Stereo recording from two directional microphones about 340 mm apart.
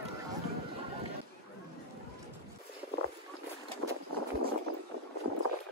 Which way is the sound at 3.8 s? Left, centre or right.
Right.